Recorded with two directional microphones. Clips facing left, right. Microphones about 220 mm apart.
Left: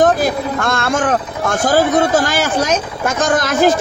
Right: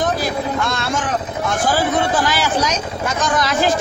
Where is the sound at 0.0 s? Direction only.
50° left (ahead or behind).